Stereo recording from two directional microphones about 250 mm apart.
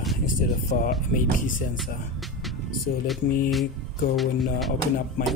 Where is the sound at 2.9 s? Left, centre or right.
Left.